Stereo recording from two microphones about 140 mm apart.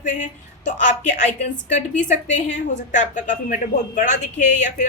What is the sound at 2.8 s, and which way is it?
A woman's voice, 65° left (ahead or behind).